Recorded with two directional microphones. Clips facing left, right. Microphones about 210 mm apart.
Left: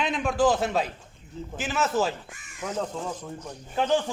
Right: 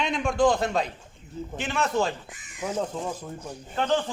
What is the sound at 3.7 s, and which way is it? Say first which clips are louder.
Speech: left 1 dB; 10° left (ahead or behind).